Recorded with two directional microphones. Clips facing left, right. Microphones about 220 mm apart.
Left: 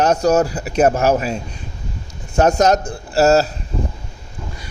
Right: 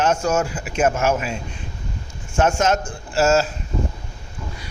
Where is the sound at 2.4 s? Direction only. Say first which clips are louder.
Left 5 dB; 40° left (ahead or behind).